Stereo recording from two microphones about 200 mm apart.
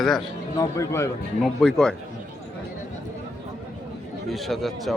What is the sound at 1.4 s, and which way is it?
Speech, centre (ahead or behind).